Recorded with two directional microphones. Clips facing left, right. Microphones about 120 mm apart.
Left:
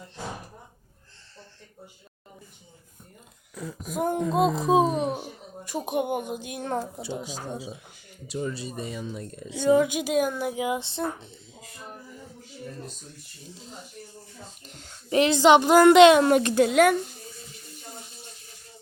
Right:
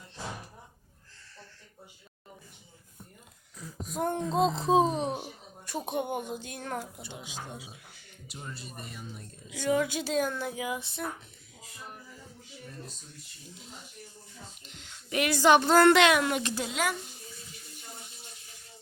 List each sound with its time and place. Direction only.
3.5 s a sound: 70° left (ahead or behind)
3.9 s speech: 5° left (ahead or behind); by 7.0 s 30° left (ahead or behind)
7.1 s speech: 40° left (ahead or behind)
8.3 s speech: 90° left
9.5 s speech: 25° left (ahead or behind)
14.6 s a child's voice: 40° left (ahead or behind)
15.2 s speech: 20° left (ahead or behind)
16.2 s speech: 50° left (ahead or behind)